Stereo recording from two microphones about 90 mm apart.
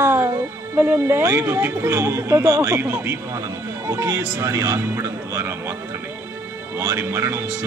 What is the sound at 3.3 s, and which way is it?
A man's voice, 35° right (ahead or behind).